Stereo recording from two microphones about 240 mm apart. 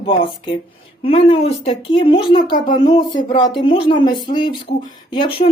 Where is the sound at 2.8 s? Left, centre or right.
Centre.